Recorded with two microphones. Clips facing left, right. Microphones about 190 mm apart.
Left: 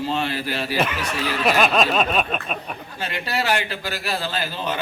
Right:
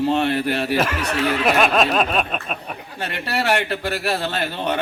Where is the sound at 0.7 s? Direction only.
5° right (ahead or behind).